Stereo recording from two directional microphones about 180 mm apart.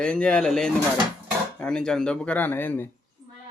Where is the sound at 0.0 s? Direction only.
5° left (ahead or behind).